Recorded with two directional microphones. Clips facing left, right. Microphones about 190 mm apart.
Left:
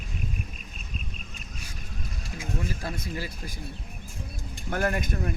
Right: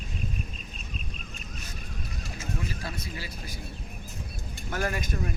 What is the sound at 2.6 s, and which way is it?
Speech, 45° left (ahead or behind).